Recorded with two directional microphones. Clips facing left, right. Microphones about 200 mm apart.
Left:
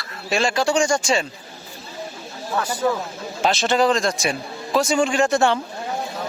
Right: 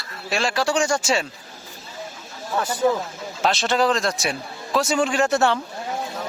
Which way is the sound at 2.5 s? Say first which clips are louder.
Even; 20° right (ahead or behind).